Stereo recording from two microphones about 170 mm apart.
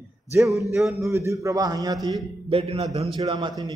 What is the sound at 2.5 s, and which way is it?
A man's voice, 35° right (ahead or behind).